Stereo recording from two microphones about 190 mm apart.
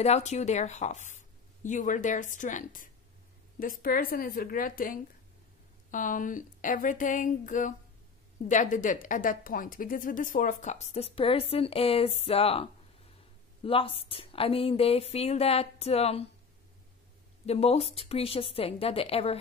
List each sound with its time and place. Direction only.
0.0 s a woman's voice: 35° left (ahead or behind)
13.7 s a woman's voice: 30° left (ahead or behind)
17.5 s a woman's voice: 35° left (ahead or behind)